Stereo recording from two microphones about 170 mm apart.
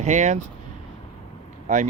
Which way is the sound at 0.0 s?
45° right (ahead or behind).